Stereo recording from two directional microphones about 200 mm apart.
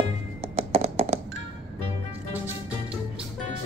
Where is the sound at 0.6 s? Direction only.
30° right (ahead or behind).